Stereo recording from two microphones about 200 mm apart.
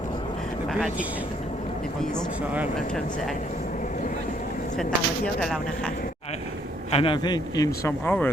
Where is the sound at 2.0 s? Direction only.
5° left (ahead or behind).